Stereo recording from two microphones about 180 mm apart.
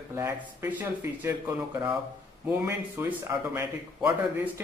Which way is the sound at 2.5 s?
10° right (ahead or behind).